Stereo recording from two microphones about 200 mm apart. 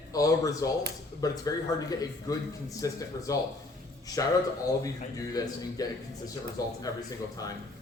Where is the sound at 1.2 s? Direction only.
20° left (ahead or behind).